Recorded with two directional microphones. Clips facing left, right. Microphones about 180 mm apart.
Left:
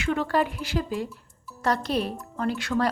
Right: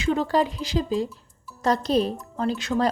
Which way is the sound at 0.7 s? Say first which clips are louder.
Right 4 dB; 15° right (ahead or behind).